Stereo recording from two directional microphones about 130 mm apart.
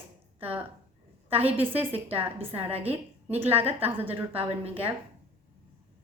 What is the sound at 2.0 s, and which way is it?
Speech, 45° right (ahead or behind).